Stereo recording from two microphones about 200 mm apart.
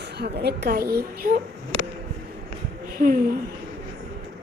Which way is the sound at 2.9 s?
45° right (ahead or behind).